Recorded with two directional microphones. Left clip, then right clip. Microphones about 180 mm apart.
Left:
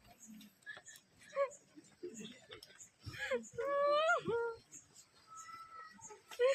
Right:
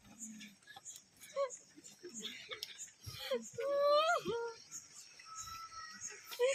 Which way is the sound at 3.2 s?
Centre (ahead or behind).